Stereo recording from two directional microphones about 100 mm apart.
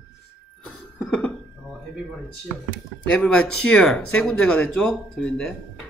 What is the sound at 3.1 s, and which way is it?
Speech, 10° left (ahead or behind).